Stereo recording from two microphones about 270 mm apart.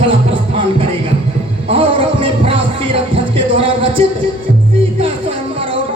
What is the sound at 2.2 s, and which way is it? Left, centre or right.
Music, centre.